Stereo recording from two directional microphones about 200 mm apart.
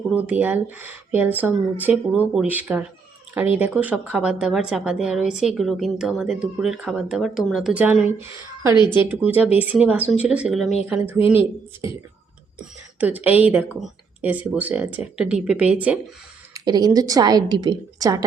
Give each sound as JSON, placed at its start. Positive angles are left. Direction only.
{"t": 0.1, "sound": "a woman's voice", "side_deg": -5}
{"t": 13.0, "sound": "speech", "side_deg": -10}
{"t": 16.6, "sound": "a woman's voice", "side_deg": -20}